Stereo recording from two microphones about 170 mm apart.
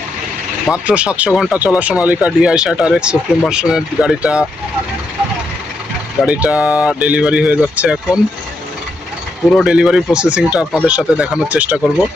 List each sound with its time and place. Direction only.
0.7 s speech: 5° right (ahead or behind)
6.2 s speech: 10° right (ahead or behind)
9.5 s speech: centre (ahead or behind)